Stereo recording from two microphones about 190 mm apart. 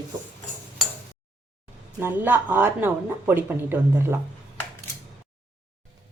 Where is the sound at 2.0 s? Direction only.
10° right (ahead or behind).